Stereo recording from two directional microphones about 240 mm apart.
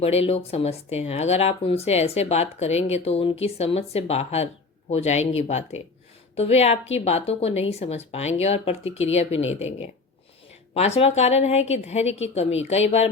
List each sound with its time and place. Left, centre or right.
0.0 s speech: left